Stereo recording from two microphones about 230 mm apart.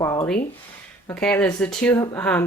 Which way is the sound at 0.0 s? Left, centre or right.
Centre.